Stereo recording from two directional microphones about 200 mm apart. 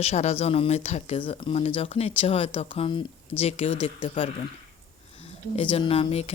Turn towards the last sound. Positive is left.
turn(degrees=30)  # may be behind; listen again after turning